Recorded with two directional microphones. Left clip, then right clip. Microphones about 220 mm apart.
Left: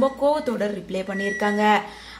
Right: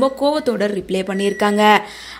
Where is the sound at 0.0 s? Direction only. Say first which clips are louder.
Right 4 dB; 35° right (ahead or behind).